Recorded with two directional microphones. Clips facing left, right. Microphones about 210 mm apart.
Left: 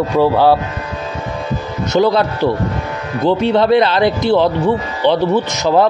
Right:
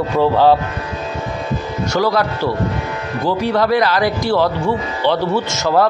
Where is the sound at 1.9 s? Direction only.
20° left (ahead or behind).